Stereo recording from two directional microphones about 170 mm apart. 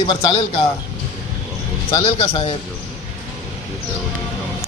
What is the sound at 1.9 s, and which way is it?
Speech, 35° left (ahead or behind).